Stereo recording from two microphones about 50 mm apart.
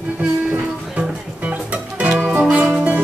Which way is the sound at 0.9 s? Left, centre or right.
Right.